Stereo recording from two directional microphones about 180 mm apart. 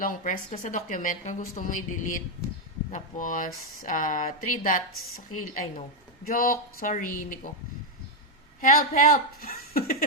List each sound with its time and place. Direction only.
0.0 s speech: 45° left (ahead or behind)
6.2 s speech: 55° left (ahead or behind)
8.6 s speech: 50° left (ahead or behind)